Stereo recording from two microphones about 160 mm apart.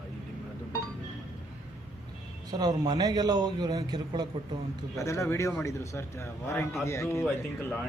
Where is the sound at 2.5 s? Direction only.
25° right (ahead or behind).